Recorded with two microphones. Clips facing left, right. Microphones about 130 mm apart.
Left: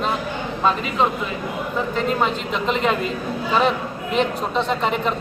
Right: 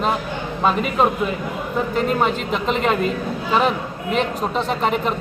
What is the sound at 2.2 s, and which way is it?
Speech, centre (ahead or behind).